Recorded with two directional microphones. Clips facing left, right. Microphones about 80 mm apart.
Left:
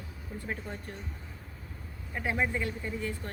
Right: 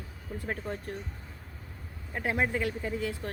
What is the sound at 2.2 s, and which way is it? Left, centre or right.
Speech, right.